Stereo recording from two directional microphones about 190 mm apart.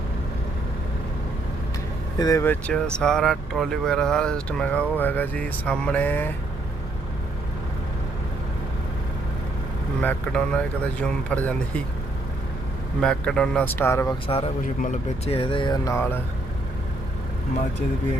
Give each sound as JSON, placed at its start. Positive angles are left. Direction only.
{"t": 2.1, "sound": "speech", "side_deg": 20}
{"t": 10.0, "sound": "speech", "side_deg": 5}
{"t": 13.0, "sound": "speech", "side_deg": 5}
{"t": 14.3, "sound": "speech", "side_deg": 30}
{"t": 15.3, "sound": "music", "side_deg": 30}